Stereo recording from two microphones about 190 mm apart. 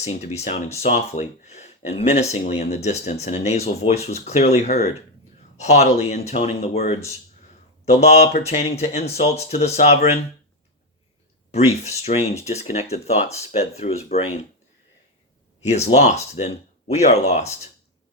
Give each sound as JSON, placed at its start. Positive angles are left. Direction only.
{"t": 0.0, "sound": "speech", "side_deg": 35}
{"t": 11.5, "sound": "speech", "side_deg": 35}
{"t": 15.6, "sound": "speech", "side_deg": 35}